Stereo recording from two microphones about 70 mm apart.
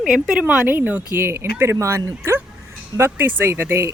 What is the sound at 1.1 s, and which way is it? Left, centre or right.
Speech, right.